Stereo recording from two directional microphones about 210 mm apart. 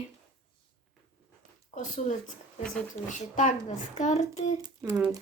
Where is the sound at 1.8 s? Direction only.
35° left (ahead or behind).